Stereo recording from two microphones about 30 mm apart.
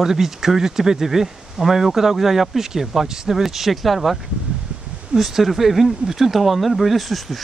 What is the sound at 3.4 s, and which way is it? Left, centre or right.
Speech, centre.